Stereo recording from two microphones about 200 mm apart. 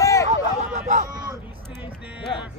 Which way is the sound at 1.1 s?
15° right (ahead or behind).